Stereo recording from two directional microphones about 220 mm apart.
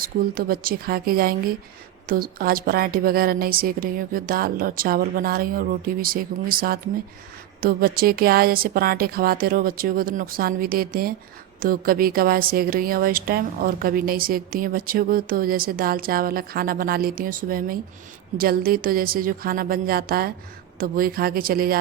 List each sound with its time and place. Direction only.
0.0 s a woman's voice: 40° right (ahead or behind)